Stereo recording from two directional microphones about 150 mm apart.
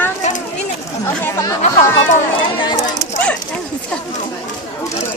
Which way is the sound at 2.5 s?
30° left (ahead or behind).